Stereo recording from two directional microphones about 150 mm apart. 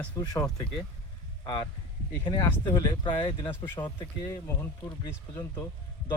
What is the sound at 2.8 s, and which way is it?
Speech, 25° left (ahead or behind).